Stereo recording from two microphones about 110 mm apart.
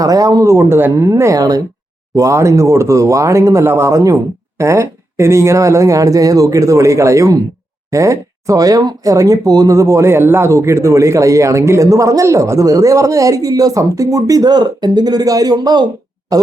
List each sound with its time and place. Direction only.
0.0 s speech: 35° right (ahead or behind)